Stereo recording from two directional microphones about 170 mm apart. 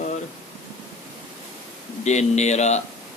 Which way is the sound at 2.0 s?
40° left (ahead or behind).